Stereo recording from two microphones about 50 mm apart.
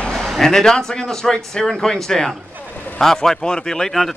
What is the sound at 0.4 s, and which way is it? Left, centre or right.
A man's voice, centre.